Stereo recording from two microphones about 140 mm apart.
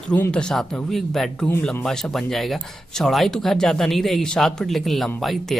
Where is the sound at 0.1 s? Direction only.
10° left (ahead or behind).